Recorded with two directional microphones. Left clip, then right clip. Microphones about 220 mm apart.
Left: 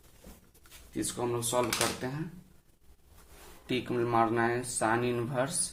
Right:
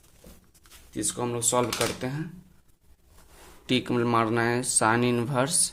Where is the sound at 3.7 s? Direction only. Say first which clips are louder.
Right 5 dB; 40° right (ahead or behind).